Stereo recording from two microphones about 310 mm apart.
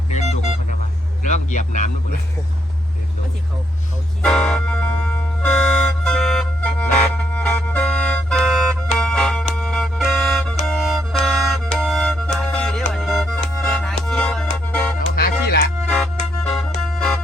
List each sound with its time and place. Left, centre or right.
0.1 s vehicle: left
1.2 s speech: left
4.2 s vehicle: centre
7.2 s music: centre
9.0 s organ: centre
9.6 s music: centre
14.9 s music: left
16.4 s music: centre